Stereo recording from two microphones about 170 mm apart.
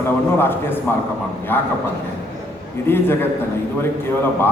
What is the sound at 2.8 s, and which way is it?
Speech, 15° left (ahead or behind).